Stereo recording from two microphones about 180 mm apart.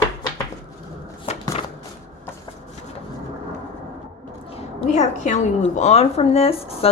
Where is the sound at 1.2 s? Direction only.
35° left (ahead or behind).